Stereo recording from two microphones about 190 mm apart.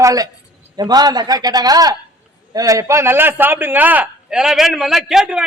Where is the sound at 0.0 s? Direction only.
20° right (ahead or behind).